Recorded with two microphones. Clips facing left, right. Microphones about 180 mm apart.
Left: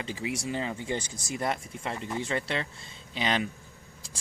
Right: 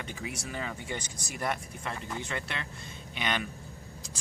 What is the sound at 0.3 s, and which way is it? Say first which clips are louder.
Speech: left 5 dB; 25° left (ahead or behind).